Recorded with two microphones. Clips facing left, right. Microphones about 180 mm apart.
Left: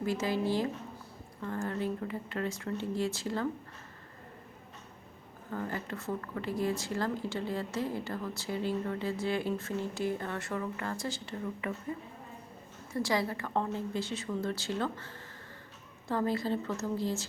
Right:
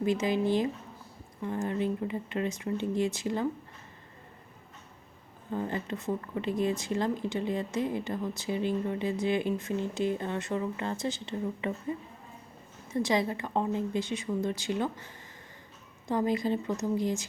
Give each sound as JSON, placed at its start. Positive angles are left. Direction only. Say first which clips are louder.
{"t": 0.0, "sound": "a woman's voice", "louder": "right 4 dB", "side_deg": -20}
{"t": 5.5, "sound": "a woman's voice", "louder": "right 4 dB", "side_deg": -20}